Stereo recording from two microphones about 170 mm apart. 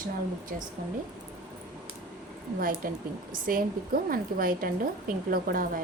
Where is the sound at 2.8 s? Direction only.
55° right (ahead or behind).